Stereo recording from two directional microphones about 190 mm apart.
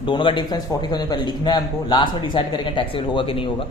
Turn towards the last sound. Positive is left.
turn(degrees=30)  # may be behind; listen again after turning